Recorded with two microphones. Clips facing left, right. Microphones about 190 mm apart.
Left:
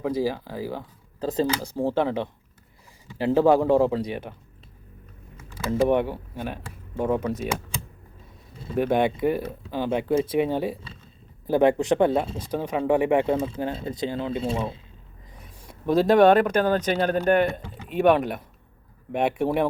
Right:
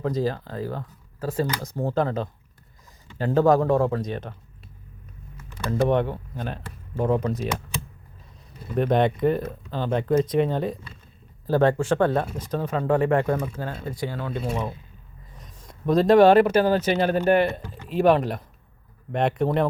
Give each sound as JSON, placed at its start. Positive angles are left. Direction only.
{"t": 0.0, "sound": "speech", "side_deg": 10}
{"t": 1.7, "sound": "speech", "side_deg": 5}
{"t": 5.7, "sound": "speech", "side_deg": 10}
{"t": 8.8, "sound": "speech", "side_deg": 5}
{"t": 15.4, "sound": "speech", "side_deg": 10}